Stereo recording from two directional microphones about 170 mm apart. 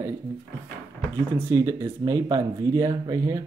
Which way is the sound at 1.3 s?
15° right (ahead or behind).